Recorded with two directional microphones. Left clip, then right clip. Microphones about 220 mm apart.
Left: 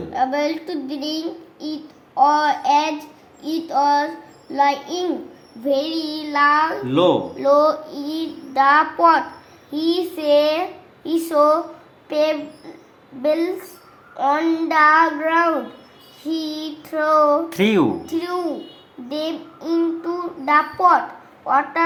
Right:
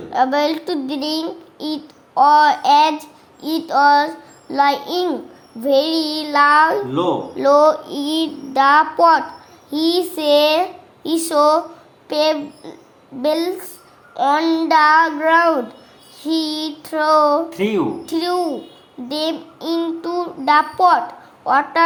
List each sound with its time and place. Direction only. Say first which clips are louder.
0.1 s child singing: right 4 dB; 45° right (ahead or behind)
17.5 s speech: left 2 dB; 40° left (ahead or behind)
18.0 s child singing: right 4 dB; 45° right (ahead or behind)
21.4 s speech: right 3 dB; 40° right (ahead or behind)